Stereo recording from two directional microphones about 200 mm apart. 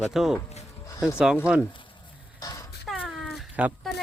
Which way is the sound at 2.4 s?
20° left (ahead or behind).